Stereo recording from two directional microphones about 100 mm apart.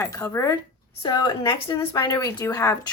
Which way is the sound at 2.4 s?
35° left (ahead or behind).